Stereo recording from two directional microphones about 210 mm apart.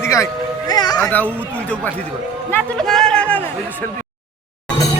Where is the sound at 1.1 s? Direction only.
10° left (ahead or behind).